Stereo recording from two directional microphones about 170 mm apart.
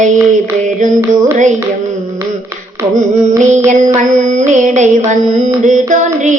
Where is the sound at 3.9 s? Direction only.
45° right (ahead or behind).